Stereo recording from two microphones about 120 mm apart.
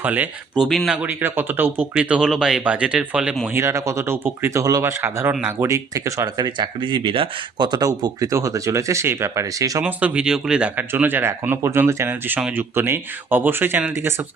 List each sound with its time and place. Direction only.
0.0 s speech: 15° right (ahead or behind)
1.0 s speech: 15° right (ahead or behind)
3.6 s speech: 25° right (ahead or behind)
9.8 s speech: 10° right (ahead or behind)